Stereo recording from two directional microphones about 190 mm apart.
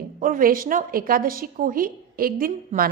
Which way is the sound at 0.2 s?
45° right (ahead or behind).